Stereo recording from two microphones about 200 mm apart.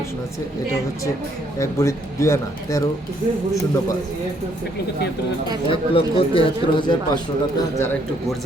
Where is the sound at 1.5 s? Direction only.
15° left (ahead or behind).